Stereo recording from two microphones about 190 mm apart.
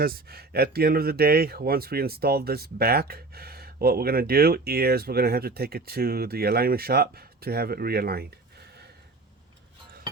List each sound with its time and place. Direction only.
0.0 s speech: 50° right (ahead or behind)